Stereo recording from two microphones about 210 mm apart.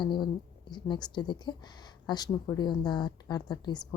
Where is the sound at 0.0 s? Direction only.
20° left (ahead or behind).